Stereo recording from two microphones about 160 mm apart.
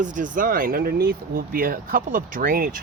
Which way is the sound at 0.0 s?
55° right (ahead or behind).